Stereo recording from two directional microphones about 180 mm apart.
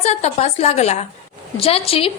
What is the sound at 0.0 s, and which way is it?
A woman's voice, 35° left (ahead or behind).